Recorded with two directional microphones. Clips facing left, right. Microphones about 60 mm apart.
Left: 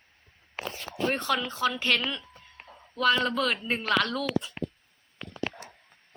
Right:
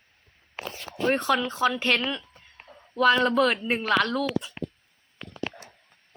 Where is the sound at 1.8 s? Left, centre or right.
Centre.